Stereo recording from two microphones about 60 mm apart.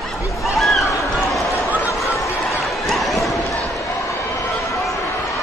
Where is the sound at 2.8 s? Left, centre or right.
Centre.